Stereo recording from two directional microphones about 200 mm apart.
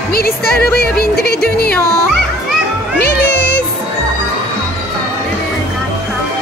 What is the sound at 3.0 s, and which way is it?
Speech, 55° left (ahead or behind).